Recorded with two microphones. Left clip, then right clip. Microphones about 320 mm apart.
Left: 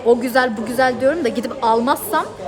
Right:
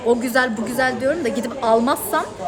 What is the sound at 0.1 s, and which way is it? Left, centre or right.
A woman's voice, centre.